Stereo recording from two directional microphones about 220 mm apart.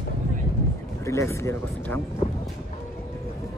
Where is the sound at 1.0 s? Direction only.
15° left (ahead or behind).